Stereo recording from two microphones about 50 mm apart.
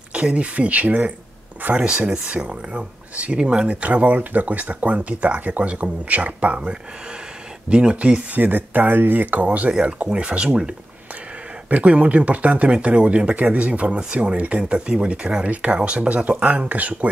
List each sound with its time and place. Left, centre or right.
0.1 s speech: right
1.8 s speech: centre
11.7 s speech: right